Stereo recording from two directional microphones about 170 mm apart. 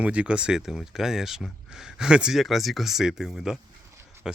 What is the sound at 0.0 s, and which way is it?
Speech, 5° right (ahead or behind).